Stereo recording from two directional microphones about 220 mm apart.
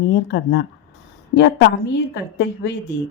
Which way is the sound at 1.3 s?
50° left (ahead or behind).